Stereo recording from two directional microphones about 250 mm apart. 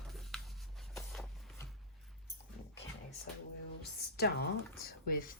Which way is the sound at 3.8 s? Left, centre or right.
Left.